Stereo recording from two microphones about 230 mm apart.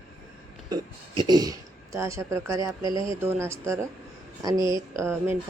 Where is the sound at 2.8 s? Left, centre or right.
Left.